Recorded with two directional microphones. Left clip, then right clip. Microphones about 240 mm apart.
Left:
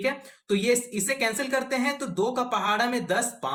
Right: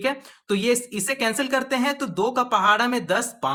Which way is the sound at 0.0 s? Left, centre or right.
Right.